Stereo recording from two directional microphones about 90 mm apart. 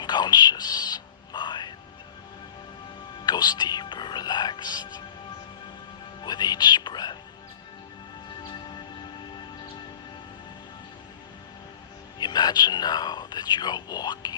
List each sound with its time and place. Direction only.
0.0 s music: 55° left (ahead or behind)
3.2 s music: 50° left (ahead or behind)
6.2 s music: 50° left (ahead or behind)
8.4 s music: 55° left (ahead or behind)
12.2 s whispering: 50° left (ahead or behind)